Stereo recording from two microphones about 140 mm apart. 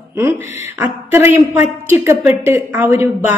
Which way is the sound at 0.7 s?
15° right (ahead or behind).